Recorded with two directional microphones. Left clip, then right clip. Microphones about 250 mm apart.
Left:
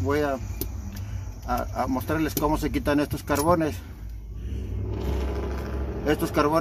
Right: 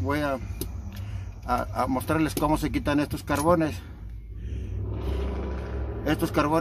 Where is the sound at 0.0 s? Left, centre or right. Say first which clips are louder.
Left 2 dB; centre.